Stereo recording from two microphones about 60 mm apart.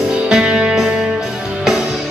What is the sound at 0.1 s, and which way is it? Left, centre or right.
Music, centre.